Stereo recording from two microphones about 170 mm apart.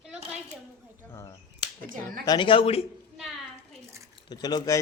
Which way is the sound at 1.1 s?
20° left (ahead or behind).